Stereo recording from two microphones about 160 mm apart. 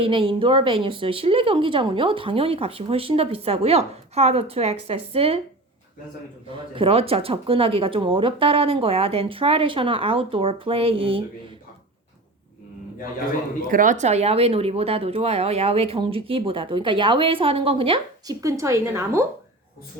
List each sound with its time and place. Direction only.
0.0 s a woman's voice: 30° right (ahead or behind)
6.7 s a woman's voice: 35° right (ahead or behind)
13.7 s a woman's voice: 55° right (ahead or behind); by 18.0 s 35° right (ahead or behind)
18.3 s a woman's voice: 20° right (ahead or behind)